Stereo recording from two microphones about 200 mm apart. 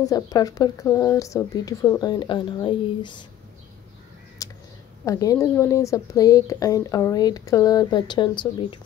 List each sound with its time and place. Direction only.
0.0 s speech: 20° left (ahead or behind)
4.4 s a sound: 15° left (ahead or behind)
5.0 s speech: 15° left (ahead or behind)